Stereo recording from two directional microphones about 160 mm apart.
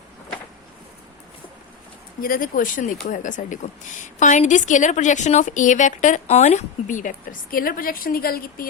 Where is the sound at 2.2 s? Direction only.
60° left (ahead or behind).